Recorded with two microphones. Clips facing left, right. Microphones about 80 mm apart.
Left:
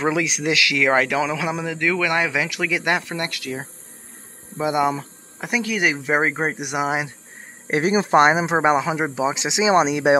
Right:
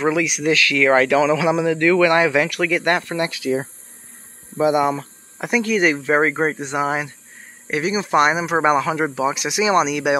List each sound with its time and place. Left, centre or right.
0.0 s speech: left; by 3.2 s centre
3.2 s speech: centre
7.6 s speech: left